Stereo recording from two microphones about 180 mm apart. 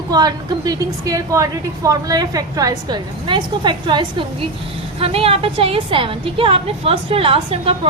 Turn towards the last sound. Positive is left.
turn(degrees=-30)  # may be behind; listen again after turning